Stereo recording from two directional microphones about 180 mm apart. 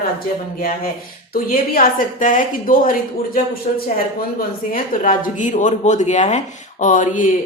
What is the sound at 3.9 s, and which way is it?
Speech, 50° left (ahead or behind).